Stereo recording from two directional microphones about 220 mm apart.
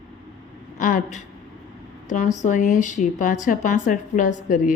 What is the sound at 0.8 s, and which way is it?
A woman's voice, 40° left (ahead or behind).